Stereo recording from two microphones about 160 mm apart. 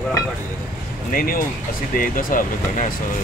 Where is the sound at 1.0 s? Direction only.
60° left (ahead or behind).